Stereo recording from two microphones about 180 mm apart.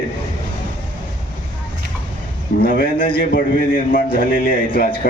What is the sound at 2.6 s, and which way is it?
A man's voice, 55° left (ahead or behind).